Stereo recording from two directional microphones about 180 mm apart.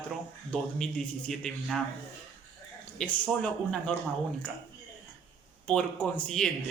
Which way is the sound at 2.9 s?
5° left (ahead or behind).